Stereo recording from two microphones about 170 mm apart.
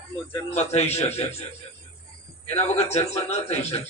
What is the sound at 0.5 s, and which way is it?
Speech, 40° left (ahead or behind).